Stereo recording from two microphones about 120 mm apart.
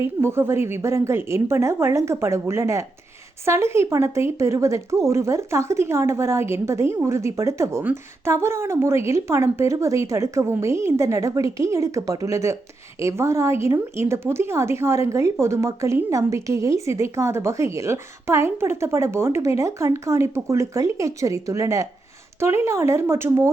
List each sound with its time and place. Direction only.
0.0 s speech: 20° right (ahead or behind)